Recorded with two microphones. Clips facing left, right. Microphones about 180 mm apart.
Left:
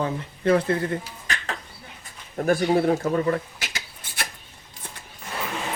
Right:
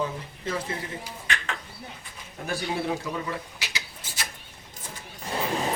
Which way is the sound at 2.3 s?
50° left (ahead or behind).